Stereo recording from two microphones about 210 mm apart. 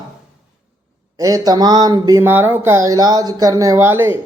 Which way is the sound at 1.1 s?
15° right (ahead or behind).